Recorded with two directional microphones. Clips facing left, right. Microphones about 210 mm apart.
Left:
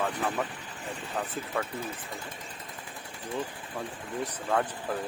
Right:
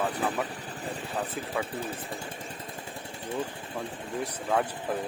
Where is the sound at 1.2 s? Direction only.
30° right (ahead or behind).